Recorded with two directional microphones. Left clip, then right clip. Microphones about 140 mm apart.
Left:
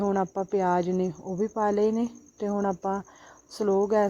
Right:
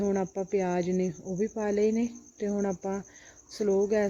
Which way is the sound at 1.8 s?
15° left (ahead or behind).